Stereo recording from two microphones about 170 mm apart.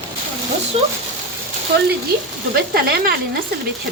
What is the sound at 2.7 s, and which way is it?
Speech, 65° right (ahead or behind).